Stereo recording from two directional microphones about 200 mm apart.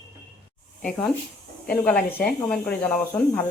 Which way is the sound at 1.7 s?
5° left (ahead or behind).